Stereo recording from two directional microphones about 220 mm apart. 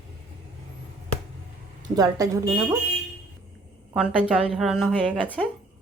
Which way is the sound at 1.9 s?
15° right (ahead or behind).